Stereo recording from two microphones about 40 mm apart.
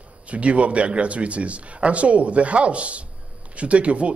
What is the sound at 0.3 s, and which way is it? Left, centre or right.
A man's voice, right.